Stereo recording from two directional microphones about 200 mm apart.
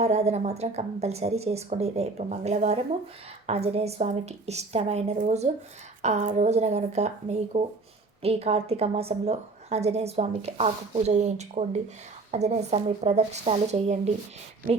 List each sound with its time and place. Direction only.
0.0 s a woman's voice: 30° right (ahead or behind)